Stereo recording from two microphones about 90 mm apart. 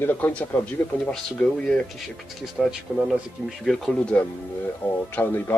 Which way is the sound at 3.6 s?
5° left (ahead or behind).